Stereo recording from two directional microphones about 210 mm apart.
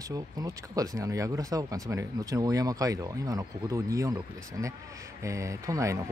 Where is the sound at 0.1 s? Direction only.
15° right (ahead or behind).